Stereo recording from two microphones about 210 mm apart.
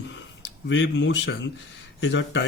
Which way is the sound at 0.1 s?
60° left (ahead or behind).